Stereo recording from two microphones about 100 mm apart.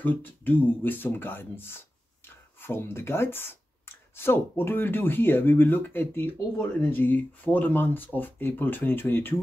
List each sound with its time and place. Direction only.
0.0 s speech: 20° left (ahead or behind)